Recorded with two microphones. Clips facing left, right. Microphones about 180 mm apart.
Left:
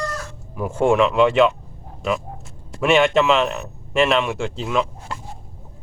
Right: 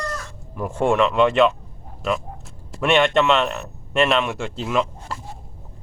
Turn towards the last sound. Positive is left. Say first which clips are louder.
# even
turn(degrees=0)  # may be behind; listen again after turning